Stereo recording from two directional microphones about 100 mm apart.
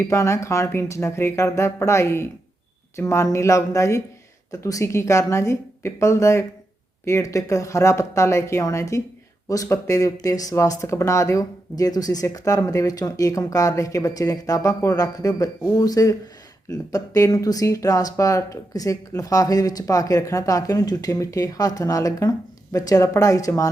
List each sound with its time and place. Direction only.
0.0 s speech: 30° left (ahead or behind)